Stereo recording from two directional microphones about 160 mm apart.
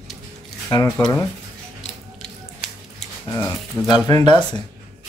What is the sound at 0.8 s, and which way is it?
Speech, 10° left (ahead or behind).